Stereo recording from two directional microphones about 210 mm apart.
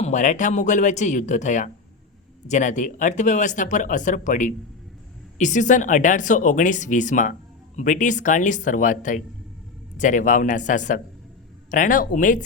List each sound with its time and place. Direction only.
0.0 s speech: 35° left (ahead or behind)